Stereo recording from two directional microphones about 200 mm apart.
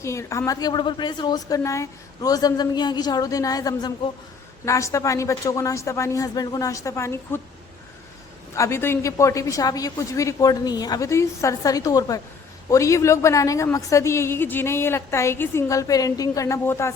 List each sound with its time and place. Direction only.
0.0 s a woman's voice: 15° left (ahead or behind)
8.5 s a woman's voice: 15° left (ahead or behind)